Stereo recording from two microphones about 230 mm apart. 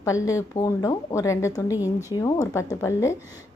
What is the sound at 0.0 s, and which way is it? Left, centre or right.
Speech, centre.